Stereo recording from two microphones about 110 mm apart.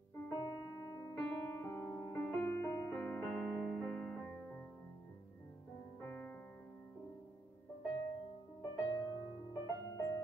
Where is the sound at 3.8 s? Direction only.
10° left (ahead or behind).